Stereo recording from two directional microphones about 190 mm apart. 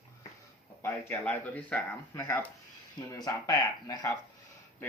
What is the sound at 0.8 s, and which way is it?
Speech, 10° left (ahead or behind).